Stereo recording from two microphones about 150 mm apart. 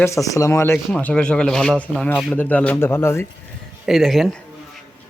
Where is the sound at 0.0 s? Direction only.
20° left (ahead or behind).